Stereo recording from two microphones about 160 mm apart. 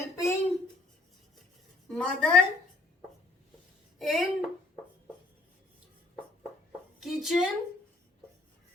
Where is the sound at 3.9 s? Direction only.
Centre (ahead or behind).